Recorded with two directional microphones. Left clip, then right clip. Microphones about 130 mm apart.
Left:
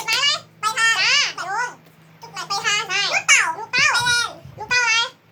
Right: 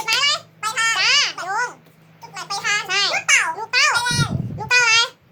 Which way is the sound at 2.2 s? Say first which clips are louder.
Left 1 dB; 5° right (ahead or behind).